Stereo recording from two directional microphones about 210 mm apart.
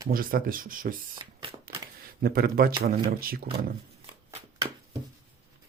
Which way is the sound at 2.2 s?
45° right (ahead or behind).